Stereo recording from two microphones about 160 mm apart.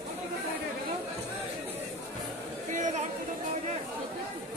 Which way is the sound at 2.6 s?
50° right (ahead or behind).